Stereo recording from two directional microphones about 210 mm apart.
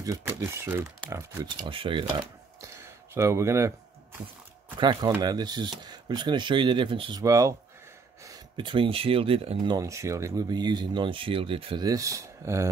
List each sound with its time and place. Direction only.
0.0 s speech: 15° right (ahead or behind)
4.7 s speech: 20° right (ahead or behind)
9.8 s speech: 15° right (ahead or behind)